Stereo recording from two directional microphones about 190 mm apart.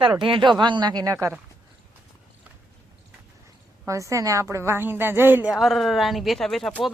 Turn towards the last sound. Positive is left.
turn(degrees=0)  # may be behind; listen again after turning